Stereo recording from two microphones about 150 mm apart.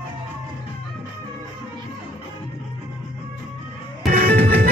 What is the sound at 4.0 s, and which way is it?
Music, 75° right (ahead or behind).